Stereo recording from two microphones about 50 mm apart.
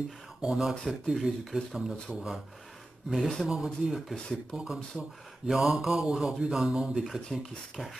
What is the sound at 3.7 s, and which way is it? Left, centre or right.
Speech, centre.